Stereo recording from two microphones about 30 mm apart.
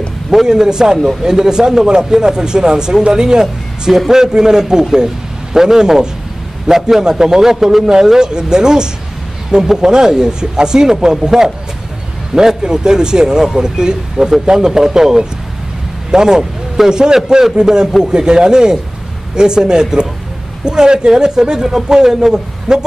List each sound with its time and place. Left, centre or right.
0.5 s a man's voice: right